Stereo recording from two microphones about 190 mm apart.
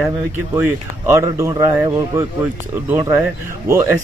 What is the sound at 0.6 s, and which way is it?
Speech, 15° right (ahead or behind).